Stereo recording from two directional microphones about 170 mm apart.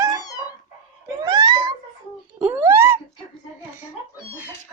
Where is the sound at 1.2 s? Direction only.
25° right (ahead or behind).